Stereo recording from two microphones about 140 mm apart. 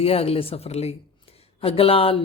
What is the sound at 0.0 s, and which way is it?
Speech, 45° left (ahead or behind).